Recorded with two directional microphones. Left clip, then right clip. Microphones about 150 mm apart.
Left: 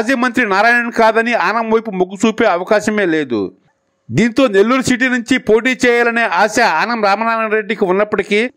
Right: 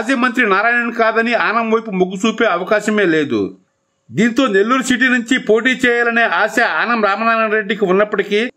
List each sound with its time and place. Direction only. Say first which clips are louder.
0.0 s a man's voice: even; 40° left (ahead or behind)